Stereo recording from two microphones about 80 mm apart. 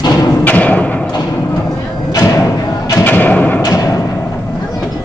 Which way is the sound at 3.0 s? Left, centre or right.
Left.